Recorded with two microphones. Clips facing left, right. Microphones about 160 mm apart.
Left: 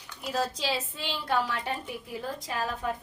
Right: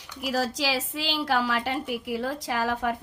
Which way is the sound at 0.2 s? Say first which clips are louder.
Right 3 dB; 90° right.